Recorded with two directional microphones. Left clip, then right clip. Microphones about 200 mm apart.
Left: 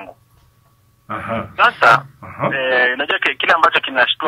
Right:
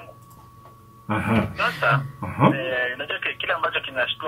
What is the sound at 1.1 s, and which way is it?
Speech, 45° left (ahead or behind).